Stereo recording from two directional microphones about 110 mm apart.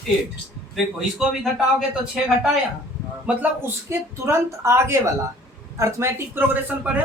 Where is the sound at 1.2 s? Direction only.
5° right (ahead or behind).